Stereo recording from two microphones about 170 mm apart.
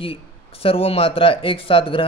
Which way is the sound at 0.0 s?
35° left (ahead or behind).